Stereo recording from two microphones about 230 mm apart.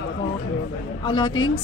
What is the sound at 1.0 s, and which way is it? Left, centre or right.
Speech, left.